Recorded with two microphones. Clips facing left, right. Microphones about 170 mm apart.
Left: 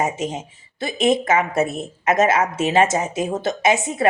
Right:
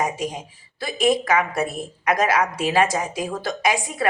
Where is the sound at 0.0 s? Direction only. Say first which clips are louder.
Left 2 dB; 25° left (ahead or behind).